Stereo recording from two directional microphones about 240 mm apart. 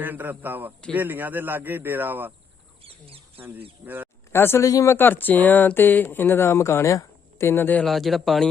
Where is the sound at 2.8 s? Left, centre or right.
Right.